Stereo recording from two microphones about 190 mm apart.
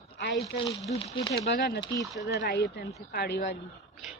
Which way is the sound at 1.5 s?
60° left (ahead or behind).